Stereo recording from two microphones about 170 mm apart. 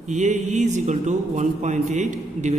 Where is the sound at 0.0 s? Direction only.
45° right (ahead or behind).